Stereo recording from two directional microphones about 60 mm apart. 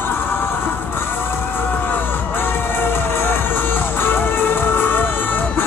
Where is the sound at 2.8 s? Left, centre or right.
Left.